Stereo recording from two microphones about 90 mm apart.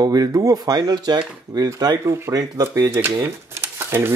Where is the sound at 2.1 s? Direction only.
35° right (ahead or behind).